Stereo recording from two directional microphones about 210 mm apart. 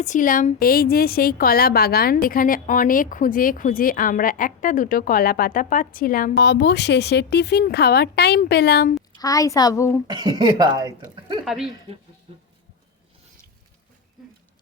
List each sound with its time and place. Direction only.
0.0 s speech: 35° left (ahead or behind)
6.3 s speech: 55° left (ahead or behind)
9.1 s a woman's voice: 15° left (ahead or behind)
10.1 s speech: 20° right (ahead or behind)
11.4 s speech: centre (ahead or behind)
12.3 s sheep: 25° right (ahead or behind)